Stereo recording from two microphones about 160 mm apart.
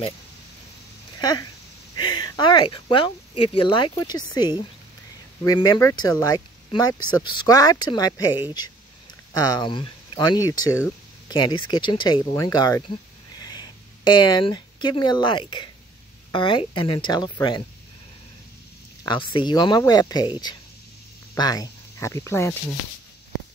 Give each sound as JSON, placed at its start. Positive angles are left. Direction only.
{"t": 2.0, "sound": "speech", "side_deg": 30}
{"t": 19.0, "sound": "speech", "side_deg": 30}